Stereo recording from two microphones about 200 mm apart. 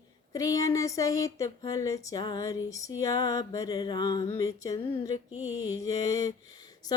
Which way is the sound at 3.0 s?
15° left (ahead or behind).